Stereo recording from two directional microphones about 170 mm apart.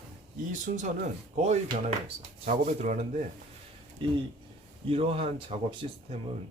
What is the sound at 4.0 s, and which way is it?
Speech, 30° right (ahead or behind).